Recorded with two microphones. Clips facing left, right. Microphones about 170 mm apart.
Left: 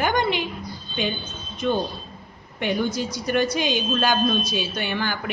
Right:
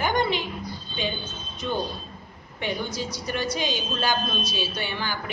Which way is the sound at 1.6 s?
60° left (ahead or behind).